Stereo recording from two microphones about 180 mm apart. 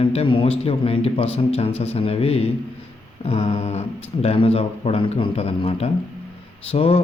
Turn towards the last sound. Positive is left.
turn(degrees=35)  # may be behind; listen again after turning